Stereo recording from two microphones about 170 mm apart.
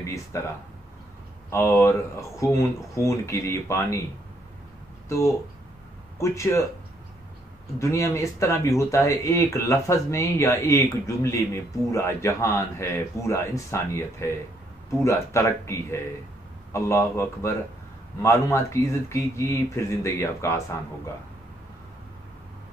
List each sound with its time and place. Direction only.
0.0 s speech: 15° left (ahead or behind)
1.5 s speech: 15° left (ahead or behind)
5.0 s speech: 15° left (ahead or behind)
7.8 s speech: 15° left (ahead or behind)